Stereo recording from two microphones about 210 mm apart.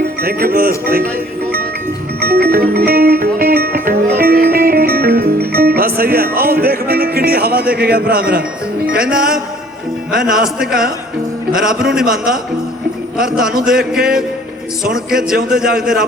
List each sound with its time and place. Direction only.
0.2 s a man's voice: 45° right (ahead or behind)
2.2 s music: 45° right (ahead or behind)
7.7 s a man's voice: 45° right (ahead or behind)
9.1 s a man's voice: 5° right (ahead or behind)